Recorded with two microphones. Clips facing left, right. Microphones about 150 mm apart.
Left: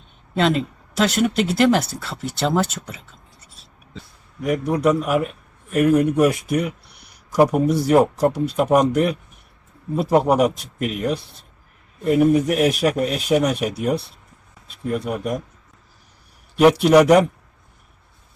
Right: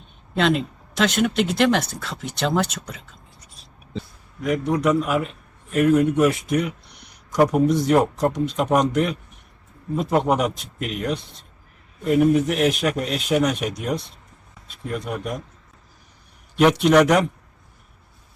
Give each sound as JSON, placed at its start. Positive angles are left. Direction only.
{"t": 0.3, "sound": "speech", "side_deg": 0}
{"t": 4.4, "sound": "speech", "side_deg": 10}
{"t": 16.6, "sound": "speech", "side_deg": 10}